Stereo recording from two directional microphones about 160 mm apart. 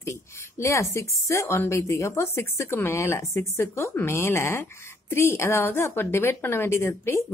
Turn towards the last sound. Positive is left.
turn(degrees=15)  # may be behind; listen again after turning